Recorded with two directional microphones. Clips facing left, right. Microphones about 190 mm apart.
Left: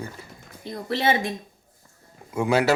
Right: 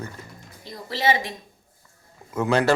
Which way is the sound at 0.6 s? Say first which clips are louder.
Even; 55° left (ahead or behind).